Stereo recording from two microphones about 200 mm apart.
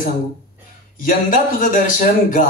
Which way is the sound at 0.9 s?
40° left (ahead or behind).